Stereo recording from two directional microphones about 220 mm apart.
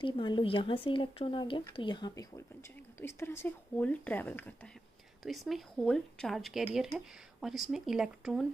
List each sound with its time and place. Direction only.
0.0 s speech: 20° left (ahead or behind); by 8.5 s centre (ahead or behind)